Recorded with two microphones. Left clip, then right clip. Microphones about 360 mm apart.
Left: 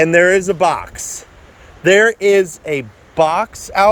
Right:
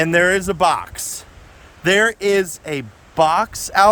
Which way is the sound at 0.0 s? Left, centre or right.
Centre.